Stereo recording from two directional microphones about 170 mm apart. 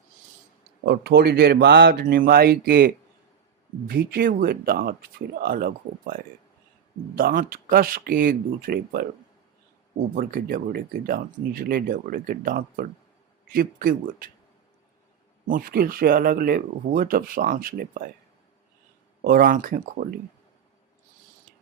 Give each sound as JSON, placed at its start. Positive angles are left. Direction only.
{"t": 0.9, "sound": "speech", "side_deg": -75}
{"t": 10.2, "sound": "speech", "side_deg": -60}
{"t": 15.4, "sound": "speech", "side_deg": -55}
{"t": 19.2, "sound": "speech", "side_deg": -60}